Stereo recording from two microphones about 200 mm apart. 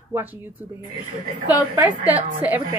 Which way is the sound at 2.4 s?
10° right (ahead or behind).